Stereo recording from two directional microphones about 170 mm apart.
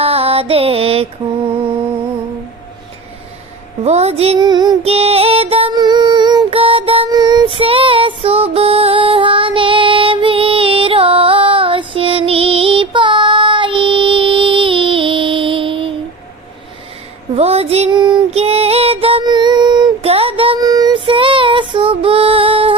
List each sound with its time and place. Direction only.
0.0 s music: 35° right (ahead or behind)
3.8 s music: 40° right (ahead or behind)
4.4 s music: 25° right (ahead or behind)
17.3 s female singing: 35° right (ahead or behind)